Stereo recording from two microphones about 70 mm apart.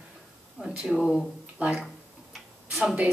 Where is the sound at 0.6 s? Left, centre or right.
Centre.